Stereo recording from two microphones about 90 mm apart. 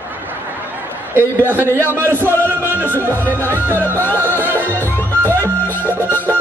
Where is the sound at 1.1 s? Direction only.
25° right (ahead or behind).